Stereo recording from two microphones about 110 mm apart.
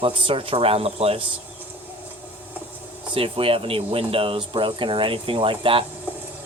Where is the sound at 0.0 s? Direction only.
55° right (ahead or behind).